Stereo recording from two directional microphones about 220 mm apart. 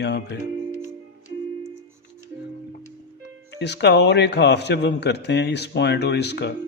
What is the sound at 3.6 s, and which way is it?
Speech, 50° left (ahead or behind).